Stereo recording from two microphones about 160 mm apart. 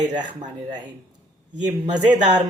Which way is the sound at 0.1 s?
50° right (ahead or behind).